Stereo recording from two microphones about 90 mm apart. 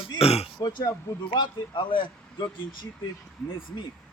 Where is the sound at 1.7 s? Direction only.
60° left (ahead or behind).